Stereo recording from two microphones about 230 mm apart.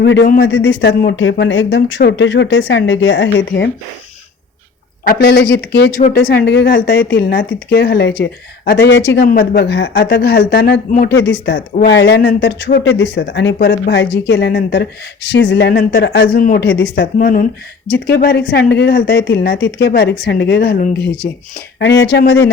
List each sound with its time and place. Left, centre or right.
0.0 s a woman's voice: left
5.0 s a woman's voice: left
21.8 s a woman's voice: left